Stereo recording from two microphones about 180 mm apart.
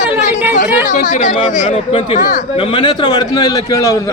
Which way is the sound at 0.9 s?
45° left (ahead or behind).